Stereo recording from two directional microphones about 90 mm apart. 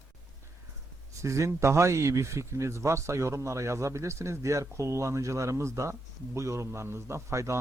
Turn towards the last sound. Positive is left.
turn(degrees=-35)  # may be behind; listen again after turning